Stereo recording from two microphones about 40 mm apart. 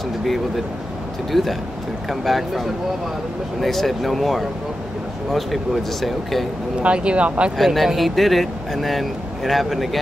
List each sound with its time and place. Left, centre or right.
1.3 s speech: centre
6.8 s speech: right
7.5 s speech: centre